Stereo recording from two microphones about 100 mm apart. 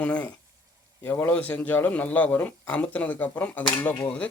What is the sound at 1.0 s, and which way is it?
A man's voice, 25° left (ahead or behind).